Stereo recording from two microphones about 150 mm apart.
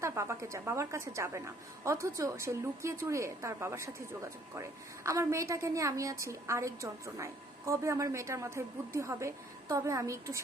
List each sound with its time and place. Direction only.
0.0 s a woman's voice: 20° right (ahead or behind)